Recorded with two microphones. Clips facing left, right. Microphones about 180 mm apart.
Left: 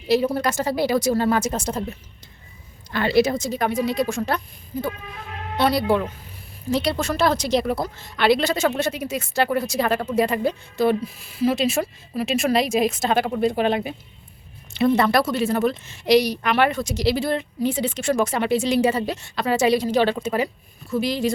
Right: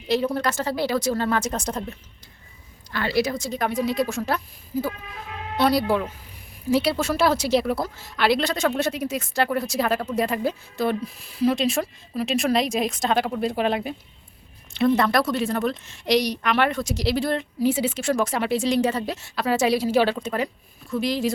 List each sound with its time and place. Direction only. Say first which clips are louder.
0.1 s speech: left 3 dB; 10° left (ahead or behind)
2.9 s a woman's voice: left 5 dB; 20° left (ahead or behind)
3.5 s a woman's voice: left 2 dB; centre (ahead or behind)